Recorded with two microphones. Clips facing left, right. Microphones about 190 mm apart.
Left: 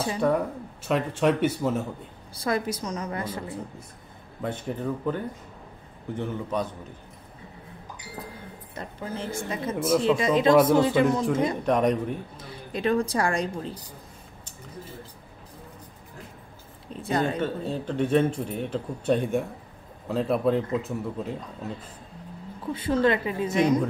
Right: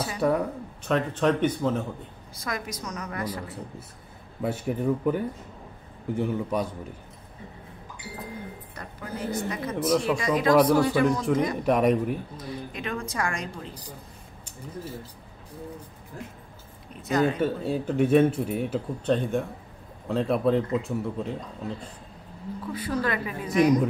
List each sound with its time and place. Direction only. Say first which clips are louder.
0.2 s speech: even; 5° right (ahead or behind)
0.8 s speech: even; 10° left (ahead or behind)
2.3 s a woman's voice: left 7 dB; 30° left (ahead or behind)
4.4 s speech: right 3 dB; 10° right (ahead or behind)
8.7 s a woman's voice: left 3 dB; 25° left (ahead or behind)
11.6 s speech: right 1 dB; 5° right (ahead or behind)
12.4 s a woman's voice: even; 35° left (ahead or behind)
17.0 s a woman's voice: right 2 dB; 30° left (ahead or behind)
17.4 s speech: right 2 dB; 10° right (ahead or behind)
19.0 s speech: left 2 dB; 10° left (ahead or behind)
22.7 s a woman's voice: left 6 dB; 25° left (ahead or behind)